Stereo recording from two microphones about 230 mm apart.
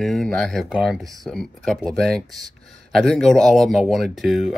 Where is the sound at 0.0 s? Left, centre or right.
Centre.